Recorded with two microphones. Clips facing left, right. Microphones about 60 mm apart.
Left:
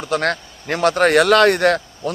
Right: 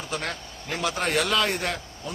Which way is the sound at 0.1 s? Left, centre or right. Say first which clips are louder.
Left 13 dB; left.